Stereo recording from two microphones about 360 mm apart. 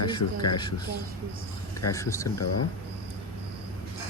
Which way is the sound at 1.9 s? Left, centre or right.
Centre.